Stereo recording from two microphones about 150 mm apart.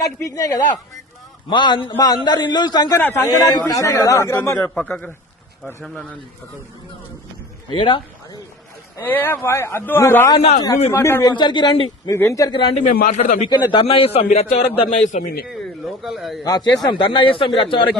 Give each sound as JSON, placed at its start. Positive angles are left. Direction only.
{"t": 0.2, "sound": "a man's voice", "side_deg": 20}
{"t": 3.0, "sound": "a man's voice", "side_deg": 15}
{"t": 3.2, "sound": "a man's voice", "side_deg": 25}
{"t": 4.5, "sound": "a man's voice", "side_deg": 5}
{"t": 7.7, "sound": "a man's voice", "side_deg": 35}
{"t": 9.0, "sound": "a man's voice", "side_deg": 15}
{"t": 11.3, "sound": "speech", "side_deg": 30}
{"t": 12.1, "sound": "a man's voice", "side_deg": 20}
{"t": 12.7, "sound": "a man's voice", "side_deg": 60}
{"t": 13.5, "sound": "a man's voice", "side_deg": 30}
{"t": 15.4, "sound": "speech", "side_deg": 0}
{"t": 16.4, "sound": "a man's voice", "side_deg": 25}